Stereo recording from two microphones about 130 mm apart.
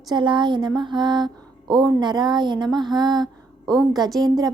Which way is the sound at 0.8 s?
35° right (ahead or behind).